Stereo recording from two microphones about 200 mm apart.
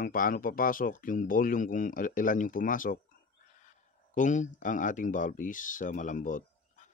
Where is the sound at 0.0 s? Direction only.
45° left (ahead or behind).